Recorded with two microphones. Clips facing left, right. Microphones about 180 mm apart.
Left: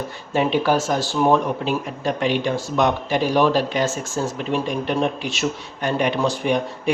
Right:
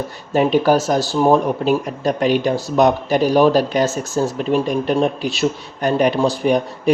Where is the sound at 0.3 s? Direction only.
40° right (ahead or behind).